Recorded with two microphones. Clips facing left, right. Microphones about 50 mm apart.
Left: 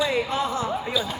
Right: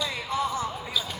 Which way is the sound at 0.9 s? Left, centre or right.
Centre.